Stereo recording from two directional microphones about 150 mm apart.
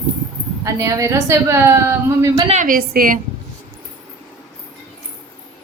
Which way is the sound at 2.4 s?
55° right (ahead or behind).